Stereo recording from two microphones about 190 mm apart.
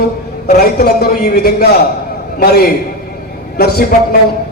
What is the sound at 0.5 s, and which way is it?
A man's voice, 55° left (ahead or behind).